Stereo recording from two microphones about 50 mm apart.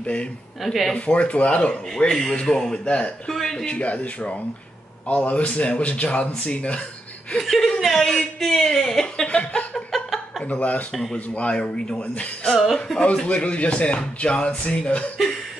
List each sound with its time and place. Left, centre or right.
0.0 s speech: left
0.7 s speech: centre
0.9 s speech: left
1.7 s speech: centre
3.3 s speech: centre
3.6 s speech: left
7.3 s speech: centre
7.8 s a sound: centre
8.1 s speech: centre
10.5 s speech: left
12.7 s speech: centre
13.0 s speech: left